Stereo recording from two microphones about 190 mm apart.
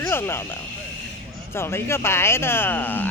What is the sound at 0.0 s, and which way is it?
Speech, 10° left (ahead or behind).